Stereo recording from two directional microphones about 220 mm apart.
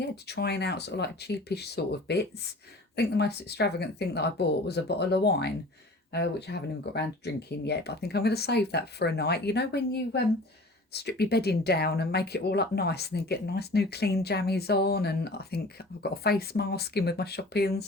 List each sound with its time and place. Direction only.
0.3 s speech: 50° left (ahead or behind)